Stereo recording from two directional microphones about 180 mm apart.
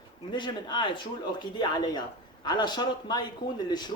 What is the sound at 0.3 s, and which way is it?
Speech, 25° left (ahead or behind).